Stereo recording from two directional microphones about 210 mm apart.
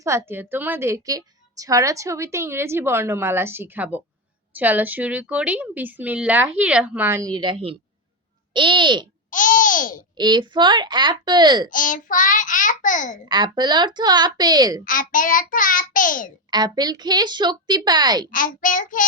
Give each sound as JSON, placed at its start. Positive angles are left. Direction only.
{"t": 0.0, "sound": "a woman's voice", "side_deg": -10}
{"t": 9.3, "sound": "babbling", "side_deg": 40}
{"t": 10.2, "sound": "a woman's voice", "side_deg": -20}
{"t": 11.7, "sound": "child singing", "side_deg": 40}
{"t": 13.2, "sound": "a woman's voice", "side_deg": -20}
{"t": 14.8, "sound": "child singing", "side_deg": 40}
{"t": 16.5, "sound": "a woman's voice", "side_deg": -20}
{"t": 18.3, "sound": "child singing", "side_deg": 40}